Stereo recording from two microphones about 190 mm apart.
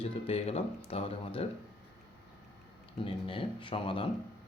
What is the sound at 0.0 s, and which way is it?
Speech, 30° left (ahead or behind).